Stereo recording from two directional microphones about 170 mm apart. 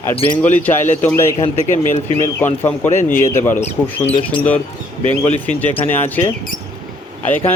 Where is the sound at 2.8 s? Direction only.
45° left (ahead or behind).